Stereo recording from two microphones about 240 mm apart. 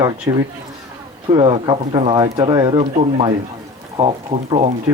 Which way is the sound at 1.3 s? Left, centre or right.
Centre.